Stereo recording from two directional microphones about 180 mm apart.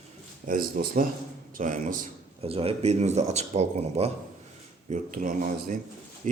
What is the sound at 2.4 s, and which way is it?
Speech, 35° right (ahead or behind).